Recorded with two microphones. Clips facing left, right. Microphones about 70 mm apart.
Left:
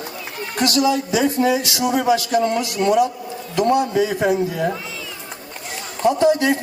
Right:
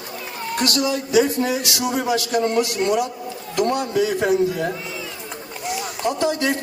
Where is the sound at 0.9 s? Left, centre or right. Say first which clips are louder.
Right 1 dB; left.